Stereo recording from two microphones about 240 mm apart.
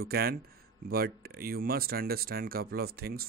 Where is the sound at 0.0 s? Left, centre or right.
Right.